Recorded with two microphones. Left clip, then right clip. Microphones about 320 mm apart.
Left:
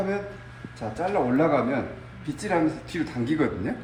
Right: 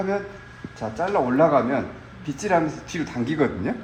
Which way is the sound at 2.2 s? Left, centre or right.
Centre.